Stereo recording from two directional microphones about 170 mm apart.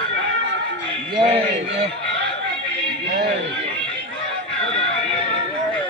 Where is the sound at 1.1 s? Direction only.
35° right (ahead or behind).